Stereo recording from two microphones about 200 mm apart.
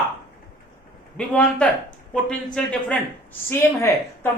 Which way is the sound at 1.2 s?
5° left (ahead or behind).